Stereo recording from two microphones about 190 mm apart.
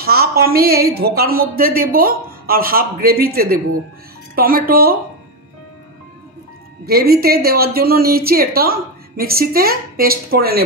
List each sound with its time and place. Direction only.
0.0 s a woman's voice: 55° right (ahead or behind)
6.9 s a woman's voice: 55° right (ahead or behind)